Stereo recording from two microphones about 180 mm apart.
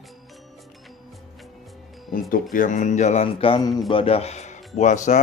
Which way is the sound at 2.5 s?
45° left (ahead or behind).